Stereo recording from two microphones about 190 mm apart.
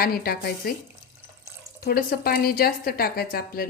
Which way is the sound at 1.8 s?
55° left (ahead or behind).